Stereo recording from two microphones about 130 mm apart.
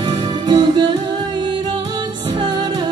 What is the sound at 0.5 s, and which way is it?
Music, 35° right (ahead or behind).